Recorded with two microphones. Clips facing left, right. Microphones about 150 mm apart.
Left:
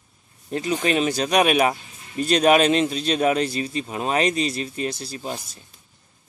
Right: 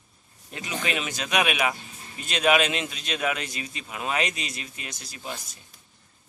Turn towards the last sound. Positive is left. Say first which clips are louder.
# left 6 dB
turn(degrees=30)  # may be behind; listen again after turning